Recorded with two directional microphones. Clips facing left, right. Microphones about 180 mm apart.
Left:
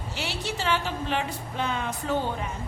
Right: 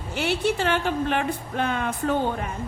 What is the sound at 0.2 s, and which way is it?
A woman's voice, 55° right (ahead or behind).